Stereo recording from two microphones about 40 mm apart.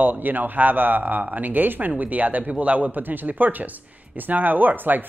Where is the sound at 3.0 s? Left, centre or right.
Right.